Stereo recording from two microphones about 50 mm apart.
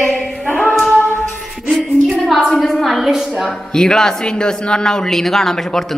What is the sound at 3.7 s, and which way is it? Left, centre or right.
A man's voice, centre.